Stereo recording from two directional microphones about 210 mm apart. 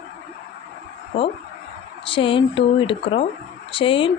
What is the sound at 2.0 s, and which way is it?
Speech, 25° left (ahead or behind).